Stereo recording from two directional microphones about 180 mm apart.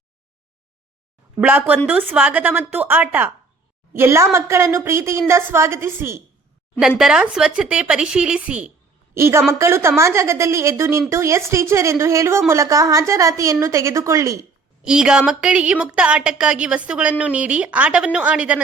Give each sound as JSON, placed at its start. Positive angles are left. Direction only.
{"t": 1.4, "sound": "a woman's voice", "side_deg": -10}
{"t": 14.8, "sound": "a woman's voice", "side_deg": -5}